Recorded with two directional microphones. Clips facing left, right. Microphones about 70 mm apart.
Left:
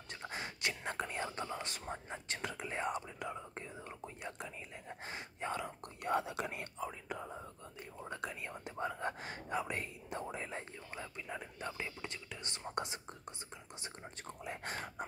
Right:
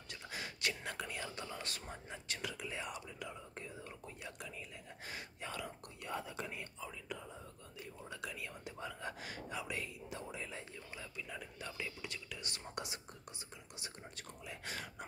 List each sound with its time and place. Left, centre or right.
0.1 s whispering: left
2.1 s whispering: left
6.0 s whispering: left
7.1 s whispering: left